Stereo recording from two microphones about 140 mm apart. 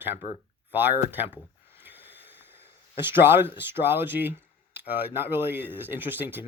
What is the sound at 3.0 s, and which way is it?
Speech, 15° right (ahead or behind).